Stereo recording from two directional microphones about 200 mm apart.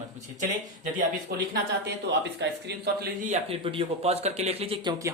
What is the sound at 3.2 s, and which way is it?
Speech, 30° right (ahead or behind).